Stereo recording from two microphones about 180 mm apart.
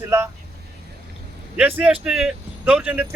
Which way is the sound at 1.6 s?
10° right (ahead or behind).